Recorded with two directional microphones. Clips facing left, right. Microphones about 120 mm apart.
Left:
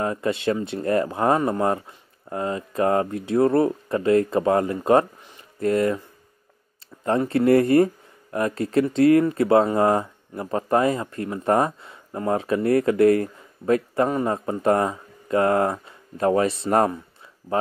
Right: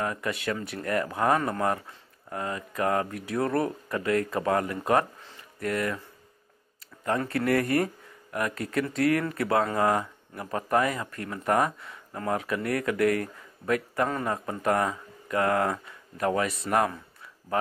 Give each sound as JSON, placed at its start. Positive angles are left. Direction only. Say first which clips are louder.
{"t": 0.0, "sound": "speech", "louder": "left 6 dB", "side_deg": 30}
{"t": 7.1, "sound": "speech", "louder": "left 7 dB", "side_deg": 25}